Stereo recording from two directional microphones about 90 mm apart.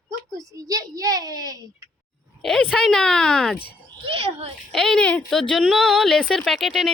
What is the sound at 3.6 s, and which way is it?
Speech, 90° right.